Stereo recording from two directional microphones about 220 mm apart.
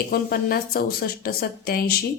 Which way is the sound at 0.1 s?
40° left (ahead or behind).